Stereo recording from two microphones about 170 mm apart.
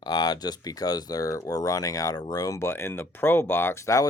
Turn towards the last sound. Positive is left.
turn(degrees=20)  # may be behind; listen again after turning